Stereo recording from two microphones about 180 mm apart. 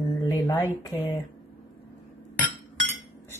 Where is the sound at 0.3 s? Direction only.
20° left (ahead or behind).